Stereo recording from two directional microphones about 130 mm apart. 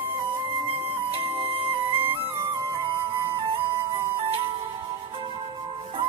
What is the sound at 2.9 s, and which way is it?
Flute, 20° right (ahead or behind).